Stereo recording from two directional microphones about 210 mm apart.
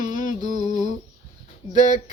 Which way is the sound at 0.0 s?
35° left (ahead or behind).